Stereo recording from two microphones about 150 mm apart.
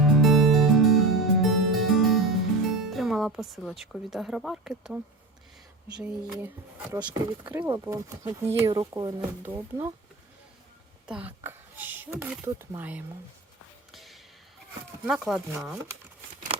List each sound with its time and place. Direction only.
0.0 s music: centre (ahead or behind)
6.0 s speech: 10° right (ahead or behind)
11.0 s speech: 10° right (ahead or behind)
13.9 s a sound: centre (ahead or behind)
15.0 s speech: centre (ahead or behind)